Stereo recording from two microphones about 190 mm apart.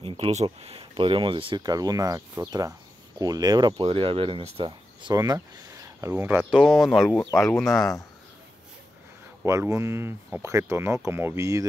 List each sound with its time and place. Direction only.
0.0 s speech: 30° right (ahead or behind); by 7.9 s centre (ahead or behind)
9.4 s speech: 15° right (ahead or behind)